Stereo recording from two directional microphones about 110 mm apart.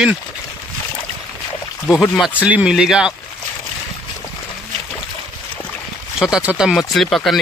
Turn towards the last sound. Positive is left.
turn(degrees=5)  # may be behind; listen again after turning